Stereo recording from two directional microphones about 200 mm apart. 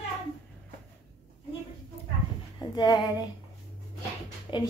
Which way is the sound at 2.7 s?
20° left (ahead or behind).